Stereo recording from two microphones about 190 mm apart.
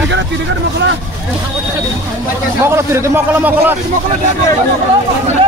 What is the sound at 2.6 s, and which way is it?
Speech, 15° right (ahead or behind).